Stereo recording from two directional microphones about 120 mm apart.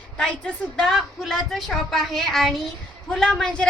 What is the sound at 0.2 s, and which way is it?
A woman's voice, 5° left (ahead or behind).